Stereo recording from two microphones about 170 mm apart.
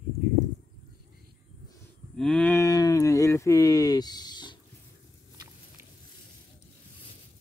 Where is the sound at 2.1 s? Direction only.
5° left (ahead or behind); by 4.6 s 25° left (ahead or behind).